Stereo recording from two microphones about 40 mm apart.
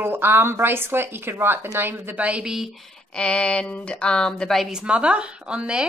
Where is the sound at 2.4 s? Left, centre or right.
Centre.